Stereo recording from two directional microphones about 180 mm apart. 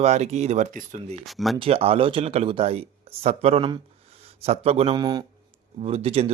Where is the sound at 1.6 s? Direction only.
30° right (ahead or behind).